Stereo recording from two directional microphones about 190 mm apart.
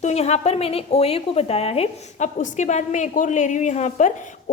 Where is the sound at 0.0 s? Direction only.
35° left (ahead or behind).